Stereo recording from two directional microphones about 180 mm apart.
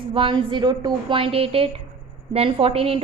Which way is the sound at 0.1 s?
30° right (ahead or behind).